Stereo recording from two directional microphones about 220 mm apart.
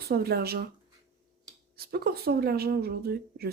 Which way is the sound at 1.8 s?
45° right (ahead or behind).